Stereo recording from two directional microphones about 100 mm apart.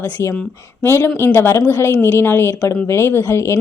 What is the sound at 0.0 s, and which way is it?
Speech, 25° left (ahead or behind).